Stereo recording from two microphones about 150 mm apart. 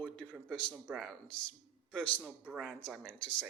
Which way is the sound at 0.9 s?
10° right (ahead or behind).